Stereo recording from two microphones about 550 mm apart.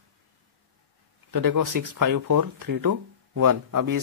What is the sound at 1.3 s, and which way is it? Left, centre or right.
Speech, right.